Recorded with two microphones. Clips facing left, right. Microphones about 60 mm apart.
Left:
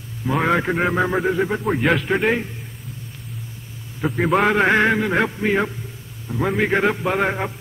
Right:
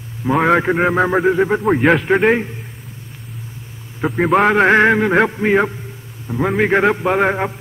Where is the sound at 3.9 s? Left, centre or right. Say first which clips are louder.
Right 4 dB; right.